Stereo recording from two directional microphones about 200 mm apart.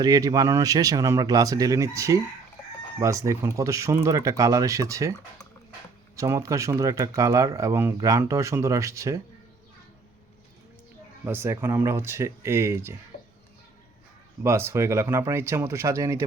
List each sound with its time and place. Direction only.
0.0 s speech: 20° right (ahead or behind)
6.1 s speech: 15° right (ahead or behind)
11.3 s speech: 10° right (ahead or behind)
14.4 s speech: 10° right (ahead or behind)